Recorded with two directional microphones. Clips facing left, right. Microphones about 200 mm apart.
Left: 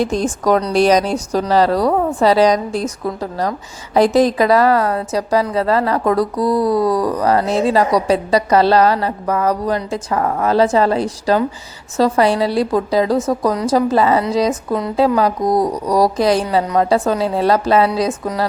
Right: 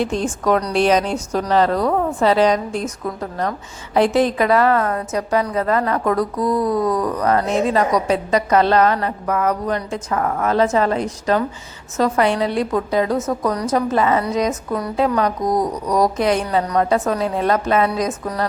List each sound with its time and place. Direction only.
0.0 s a woman's voice: 40° left (ahead or behind)